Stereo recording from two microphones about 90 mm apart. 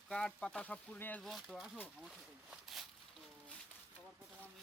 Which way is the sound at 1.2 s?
Centre (ahead or behind).